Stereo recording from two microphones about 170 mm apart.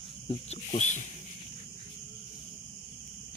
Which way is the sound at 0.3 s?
40° left (ahead or behind).